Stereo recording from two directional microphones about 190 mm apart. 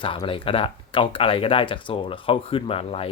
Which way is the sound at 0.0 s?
25° left (ahead or behind).